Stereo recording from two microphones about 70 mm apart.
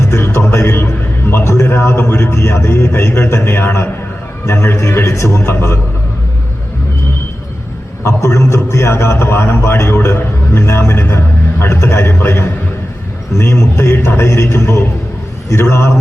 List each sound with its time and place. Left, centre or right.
0.1 s a man's voice: left
8.0 s a man's voice: left